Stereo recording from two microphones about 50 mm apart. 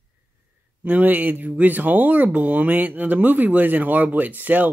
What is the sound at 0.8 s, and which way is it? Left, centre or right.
Speech, right.